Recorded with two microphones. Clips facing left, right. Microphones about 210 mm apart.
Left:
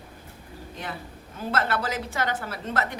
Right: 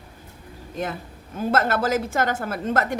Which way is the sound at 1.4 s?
45° right (ahead or behind).